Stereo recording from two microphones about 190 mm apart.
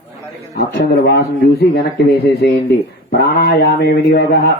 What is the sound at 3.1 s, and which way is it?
Speech, 55° left (ahead or behind).